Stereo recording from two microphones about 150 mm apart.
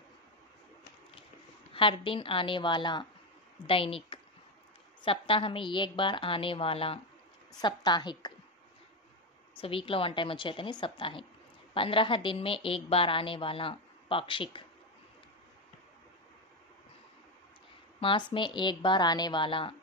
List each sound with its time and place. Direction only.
1.7 s a woman's voice: 35° left (ahead or behind)
9.6 s a woman's voice: 35° left (ahead or behind)
18.0 s a woman's voice: 35° left (ahead or behind)